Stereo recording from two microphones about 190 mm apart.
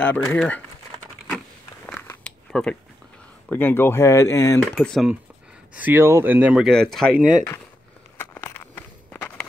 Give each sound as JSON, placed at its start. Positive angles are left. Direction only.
{"t": 0.0, "sound": "speech", "side_deg": 10}
{"t": 1.9, "sound": "a sound", "side_deg": 10}
{"t": 3.4, "sound": "speech", "side_deg": 10}
{"t": 4.6, "sound": "speech", "side_deg": 0}
{"t": 5.8, "sound": "speech", "side_deg": -10}
{"t": 8.2, "sound": "walk", "side_deg": 15}